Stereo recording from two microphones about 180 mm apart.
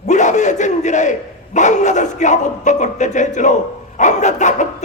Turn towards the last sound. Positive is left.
turn(degrees=40)  # may be behind; listen again after turning